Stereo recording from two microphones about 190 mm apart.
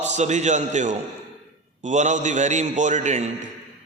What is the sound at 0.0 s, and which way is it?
A man's voice, 40° right (ahead or behind).